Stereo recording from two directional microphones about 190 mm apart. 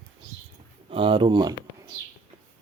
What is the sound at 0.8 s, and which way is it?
Speech, 30° right (ahead or behind).